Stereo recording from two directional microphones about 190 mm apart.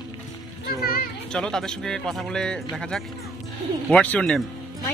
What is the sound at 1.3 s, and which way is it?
Speech, 5° left (ahead or behind).